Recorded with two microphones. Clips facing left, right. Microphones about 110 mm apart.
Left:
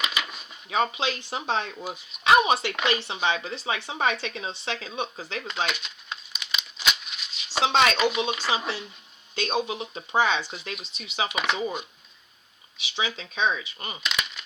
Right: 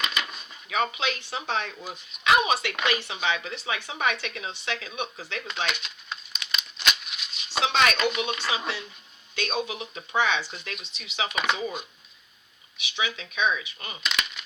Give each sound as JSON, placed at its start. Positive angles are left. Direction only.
{"t": 0.0, "sound": "a sound", "side_deg": 5}
{"t": 0.7, "sound": "speech", "side_deg": 30}
{"t": 5.7, "sound": "crumpling", "side_deg": 0}
{"t": 7.6, "sound": "a sound", "side_deg": 30}
{"t": 8.4, "sound": "speech", "side_deg": 30}
{"t": 11.3, "sound": "speech", "side_deg": 5}
{"t": 12.7, "sound": "speech", "side_deg": 30}
{"t": 14.0, "sound": "coin", "side_deg": 0}